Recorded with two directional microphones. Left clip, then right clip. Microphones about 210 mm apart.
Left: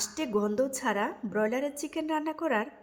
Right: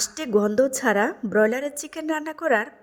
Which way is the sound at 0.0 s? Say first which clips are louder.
Right 8 dB; 25° right (ahead or behind).